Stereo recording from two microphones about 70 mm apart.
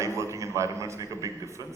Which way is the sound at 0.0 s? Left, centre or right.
Right.